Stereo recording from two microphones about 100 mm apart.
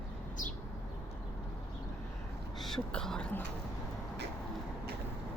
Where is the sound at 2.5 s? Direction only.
5° left (ahead or behind).